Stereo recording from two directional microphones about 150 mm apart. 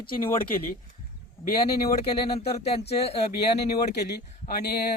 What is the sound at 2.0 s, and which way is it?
Speech, 40° left (ahead or behind).